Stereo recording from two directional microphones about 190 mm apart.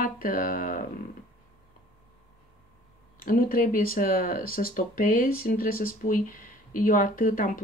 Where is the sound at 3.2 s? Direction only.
50° left (ahead or behind).